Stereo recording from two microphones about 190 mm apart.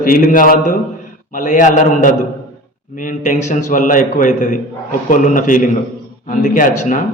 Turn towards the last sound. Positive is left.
turn(degrees=40)  # may be behind; listen again after turning